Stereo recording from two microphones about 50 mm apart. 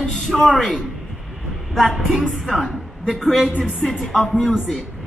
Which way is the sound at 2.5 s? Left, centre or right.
Centre.